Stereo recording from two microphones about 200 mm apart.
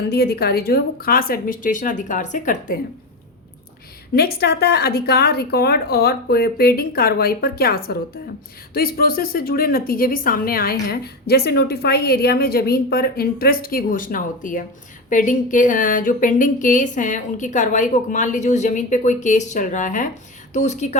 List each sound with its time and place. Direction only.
0.1 s a woman's voice: 50° left (ahead or behind)
4.1 s a woman's voice: 50° left (ahead or behind); by 21.0 s 35° left (ahead or behind)